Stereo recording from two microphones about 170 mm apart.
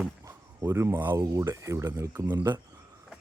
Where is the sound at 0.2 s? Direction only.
15° right (ahead or behind).